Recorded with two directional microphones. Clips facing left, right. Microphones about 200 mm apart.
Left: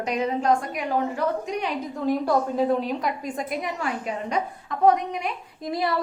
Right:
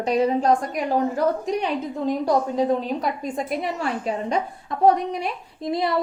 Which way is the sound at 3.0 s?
30° right (ahead or behind).